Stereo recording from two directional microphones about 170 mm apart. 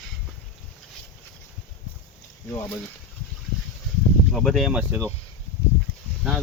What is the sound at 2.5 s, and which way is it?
Speech, 10° left (ahead or behind).